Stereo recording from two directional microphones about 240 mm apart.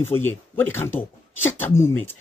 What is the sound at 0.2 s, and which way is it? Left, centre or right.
Speech, centre.